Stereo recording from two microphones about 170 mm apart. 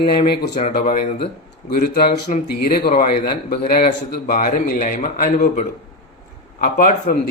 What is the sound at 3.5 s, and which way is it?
A man's voice, 60° left (ahead or behind).